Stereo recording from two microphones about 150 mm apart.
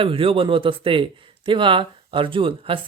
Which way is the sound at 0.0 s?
35° right (ahead or behind).